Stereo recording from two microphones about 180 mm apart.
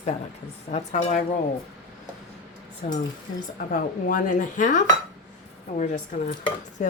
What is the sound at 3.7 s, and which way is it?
A woman's voice, 45° left (ahead or behind).